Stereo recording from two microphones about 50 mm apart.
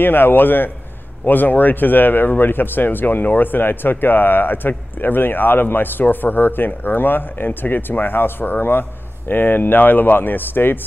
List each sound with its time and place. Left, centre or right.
0.0 s speech: left